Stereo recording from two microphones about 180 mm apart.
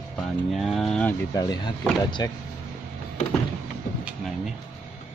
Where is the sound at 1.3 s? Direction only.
20° left (ahead or behind).